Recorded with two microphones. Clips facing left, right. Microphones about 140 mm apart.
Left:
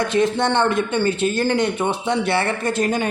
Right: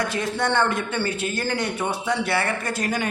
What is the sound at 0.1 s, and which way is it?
Speech, 25° left (ahead or behind).